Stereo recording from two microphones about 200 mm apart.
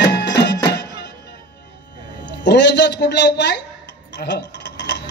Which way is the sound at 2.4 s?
60° left (ahead or behind).